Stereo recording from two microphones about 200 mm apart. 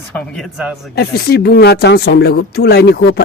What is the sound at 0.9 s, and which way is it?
Speech, 50° left (ahead or behind).